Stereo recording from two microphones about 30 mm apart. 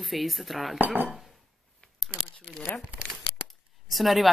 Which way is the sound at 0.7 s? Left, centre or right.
Right.